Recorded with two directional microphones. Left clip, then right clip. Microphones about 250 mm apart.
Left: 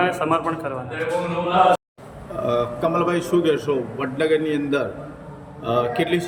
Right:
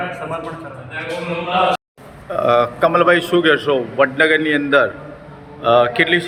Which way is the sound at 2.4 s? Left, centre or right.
Centre.